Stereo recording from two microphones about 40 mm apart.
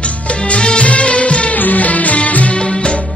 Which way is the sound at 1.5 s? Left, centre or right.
Left.